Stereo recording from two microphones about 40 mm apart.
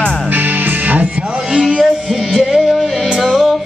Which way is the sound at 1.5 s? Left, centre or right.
Centre.